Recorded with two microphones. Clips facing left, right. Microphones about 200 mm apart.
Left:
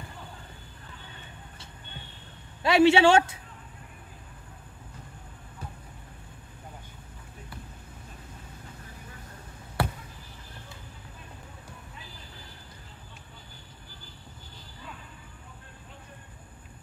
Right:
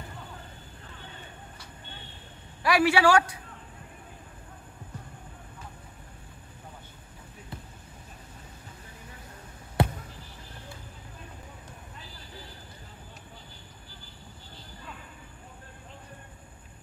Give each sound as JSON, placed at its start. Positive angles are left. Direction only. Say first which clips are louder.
{"t": 2.6, "sound": "a man's voice", "louder": "left 3 dB", "side_deg": 25}
{"t": 9.8, "sound": "basketball bounce", "louder": "right 3 dB", "side_deg": -20}